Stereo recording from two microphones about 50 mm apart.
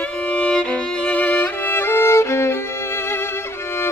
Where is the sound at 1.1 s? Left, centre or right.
Left.